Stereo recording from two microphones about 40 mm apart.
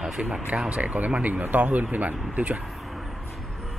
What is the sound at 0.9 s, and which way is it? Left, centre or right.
Speech, right.